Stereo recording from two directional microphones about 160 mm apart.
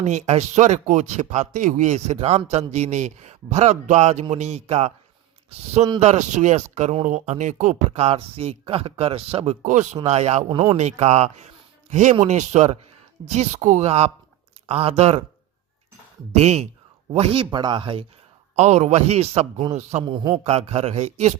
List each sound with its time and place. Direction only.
0.0 s a man's voice: 45° right (ahead or behind)
16.3 s speech: 40° right (ahead or behind)
18.5 s speech: 45° right (ahead or behind)
20.1 s a man's voice: 30° right (ahead or behind)
20.4 s speech: 40° right (ahead or behind)